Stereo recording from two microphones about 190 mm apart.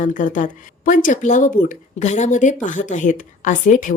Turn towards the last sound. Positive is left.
turn(degrees=45)  # may be behind; listen again after turning